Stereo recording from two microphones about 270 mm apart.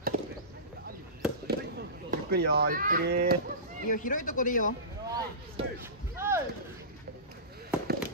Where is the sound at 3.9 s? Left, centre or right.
Left.